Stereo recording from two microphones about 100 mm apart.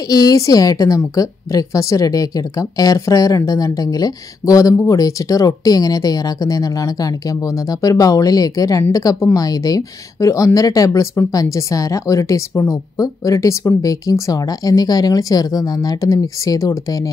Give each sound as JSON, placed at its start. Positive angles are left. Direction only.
{"t": 0.1, "sound": "a woman's voice", "side_deg": 40}